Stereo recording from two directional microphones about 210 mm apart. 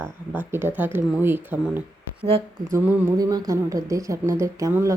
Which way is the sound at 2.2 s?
25° right (ahead or behind).